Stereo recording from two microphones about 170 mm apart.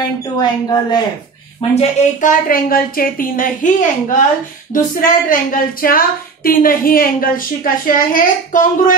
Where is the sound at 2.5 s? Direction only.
60° left (ahead or behind).